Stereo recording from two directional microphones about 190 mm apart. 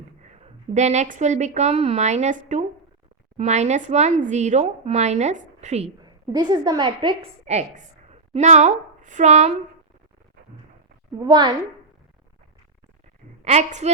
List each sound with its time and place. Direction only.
0.3 s a woman's voice: 35° right (ahead or behind)
6.0 s a woman's voice: 20° right (ahead or behind); by 9.6 s 40° right (ahead or behind)
11.3 s a woman's voice: 20° right (ahead or behind)
13.4 s speech: 40° right (ahead or behind)